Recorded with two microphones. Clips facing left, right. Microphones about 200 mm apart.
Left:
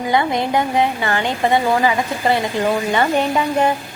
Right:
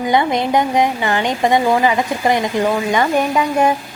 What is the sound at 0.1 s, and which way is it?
Speech, 20° right (ahead or behind).